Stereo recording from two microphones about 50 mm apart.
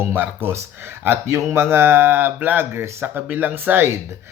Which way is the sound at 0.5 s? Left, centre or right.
Right.